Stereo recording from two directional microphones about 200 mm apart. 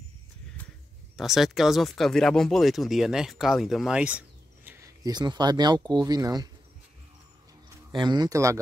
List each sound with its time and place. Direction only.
1.1 s speech: centre (ahead or behind); by 6.5 s 20° right (ahead or behind)
7.9 s speech: 20° right (ahead or behind)